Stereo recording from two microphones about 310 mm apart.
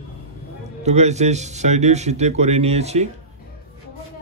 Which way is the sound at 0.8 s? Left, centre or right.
Right.